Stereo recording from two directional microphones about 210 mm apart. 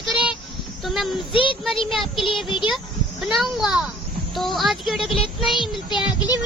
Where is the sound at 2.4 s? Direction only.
20° left (ahead or behind).